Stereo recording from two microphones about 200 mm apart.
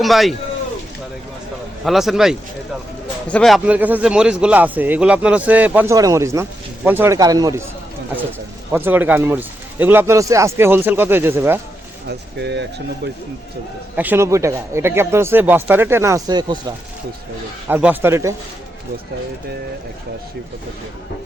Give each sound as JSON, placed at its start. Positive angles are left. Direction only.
{"t": 0.0, "sound": "a man's voice", "side_deg": 0}
{"t": 1.8, "sound": "a man's voice", "side_deg": 0}
{"t": 8.7, "sound": "a man's voice", "side_deg": -10}
{"t": 12.0, "sound": "speech", "side_deg": -60}
{"t": 13.9, "sound": "a man's voice", "side_deg": -10}
{"t": 17.7, "sound": "a man's voice", "side_deg": -10}